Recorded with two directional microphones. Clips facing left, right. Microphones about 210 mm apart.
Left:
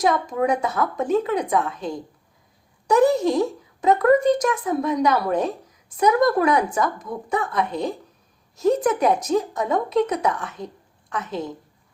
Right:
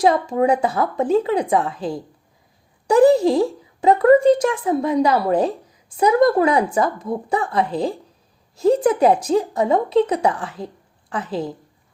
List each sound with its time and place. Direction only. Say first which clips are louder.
0.0 s speech: right 4 dB; 30° right (ahead or behind)